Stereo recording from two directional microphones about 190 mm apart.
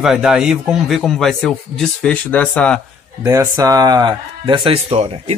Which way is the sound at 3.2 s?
15° right (ahead or behind).